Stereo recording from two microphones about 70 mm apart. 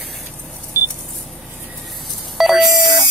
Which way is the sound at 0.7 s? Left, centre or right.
Right.